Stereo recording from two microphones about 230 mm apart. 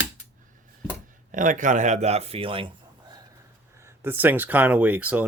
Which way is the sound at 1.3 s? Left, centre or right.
Right.